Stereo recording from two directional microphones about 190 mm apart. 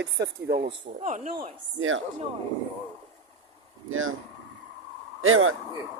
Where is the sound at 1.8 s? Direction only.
90° right.